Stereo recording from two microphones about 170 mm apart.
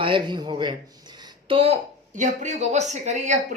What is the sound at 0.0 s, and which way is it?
A woman's voice, 30° right (ahead or behind).